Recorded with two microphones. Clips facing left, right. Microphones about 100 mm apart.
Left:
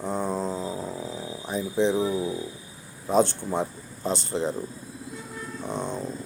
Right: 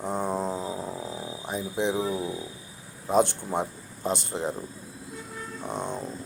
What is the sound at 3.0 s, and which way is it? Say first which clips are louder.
Speech: left 1 dB; 15° right (ahead or behind).